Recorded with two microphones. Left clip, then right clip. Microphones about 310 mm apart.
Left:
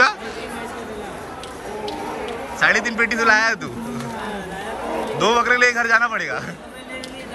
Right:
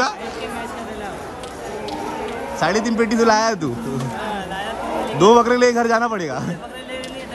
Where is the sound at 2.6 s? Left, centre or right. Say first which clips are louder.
Left 2 dB; centre.